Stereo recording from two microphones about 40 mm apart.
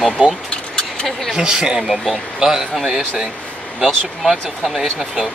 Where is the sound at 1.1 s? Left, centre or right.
Centre.